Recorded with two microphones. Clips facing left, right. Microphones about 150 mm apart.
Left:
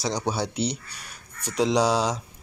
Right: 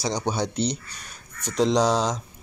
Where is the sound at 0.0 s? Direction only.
5° left (ahead or behind).